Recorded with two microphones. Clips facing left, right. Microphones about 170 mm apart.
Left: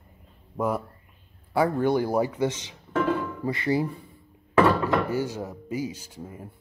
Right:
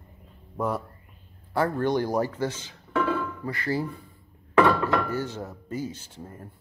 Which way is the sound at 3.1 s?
25° left (ahead or behind).